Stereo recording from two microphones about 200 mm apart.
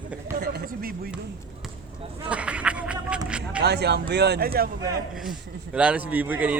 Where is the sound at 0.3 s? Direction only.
50° right (ahead or behind).